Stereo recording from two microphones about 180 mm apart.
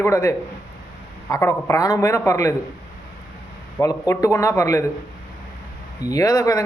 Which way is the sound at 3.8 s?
20° left (ahead or behind).